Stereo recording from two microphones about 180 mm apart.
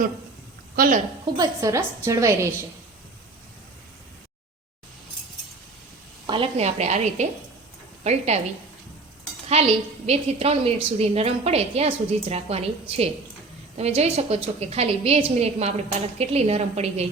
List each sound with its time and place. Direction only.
0.8 s a woman's voice: 45° right (ahead or behind)
1.4 s a woman's voice: 15° right (ahead or behind)
6.2 s a woman's voice: 30° right (ahead or behind)
9.5 s a woman's voice: 35° right (ahead or behind)
13.7 s a woman's voice: 35° right (ahead or behind)